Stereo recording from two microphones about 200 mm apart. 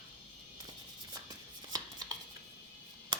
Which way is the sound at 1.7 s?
20° right (ahead or behind).